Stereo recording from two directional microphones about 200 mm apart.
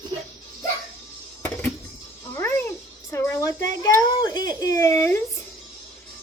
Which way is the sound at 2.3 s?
15° left (ahead or behind).